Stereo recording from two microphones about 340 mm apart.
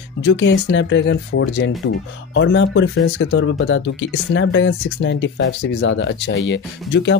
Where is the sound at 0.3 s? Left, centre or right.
Left.